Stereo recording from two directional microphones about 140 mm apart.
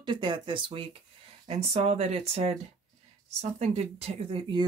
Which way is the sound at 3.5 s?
50° right (ahead or behind).